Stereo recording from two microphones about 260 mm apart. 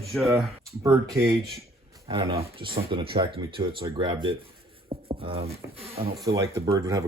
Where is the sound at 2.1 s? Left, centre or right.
Right.